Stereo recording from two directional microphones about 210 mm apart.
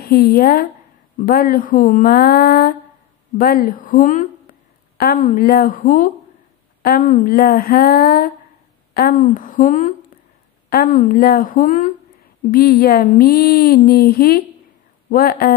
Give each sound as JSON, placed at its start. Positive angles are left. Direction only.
{"t": 0.0, "sound": "a woman's voice", "side_deg": 45}